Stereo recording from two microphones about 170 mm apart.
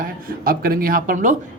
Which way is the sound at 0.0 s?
60° right (ahead or behind).